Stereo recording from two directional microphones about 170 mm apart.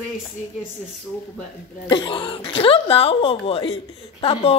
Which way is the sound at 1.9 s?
30° left (ahead or behind).